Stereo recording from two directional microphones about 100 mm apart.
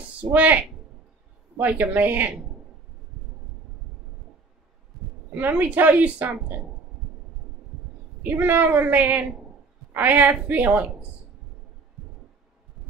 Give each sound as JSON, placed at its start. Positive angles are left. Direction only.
{"t": 0.3, "sound": "a woman's voice", "side_deg": -15}
{"t": 5.3, "sound": "a woman's voice", "side_deg": -15}
{"t": 8.2, "sound": "a woman's voice", "side_deg": -20}